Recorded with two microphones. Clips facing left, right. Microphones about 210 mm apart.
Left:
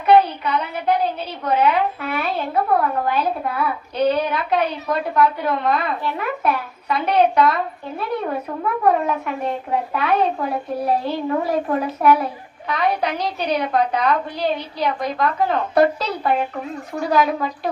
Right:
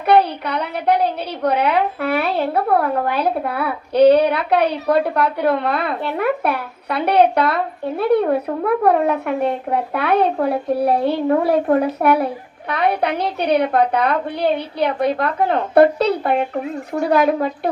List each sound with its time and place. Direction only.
0.4 s a woman's voice: 70° right (ahead or behind)